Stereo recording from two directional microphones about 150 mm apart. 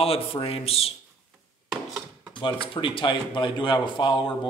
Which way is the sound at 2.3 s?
35° left (ahead or behind).